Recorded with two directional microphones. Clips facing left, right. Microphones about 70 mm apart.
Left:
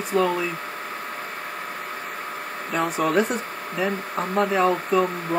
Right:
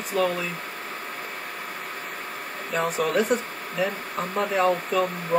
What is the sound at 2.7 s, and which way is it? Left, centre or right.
Speech, centre.